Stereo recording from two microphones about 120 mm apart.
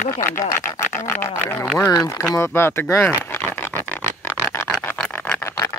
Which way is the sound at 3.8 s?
15° left (ahead or behind).